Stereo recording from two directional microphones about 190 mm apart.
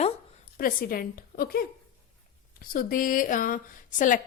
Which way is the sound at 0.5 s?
50° left (ahead or behind).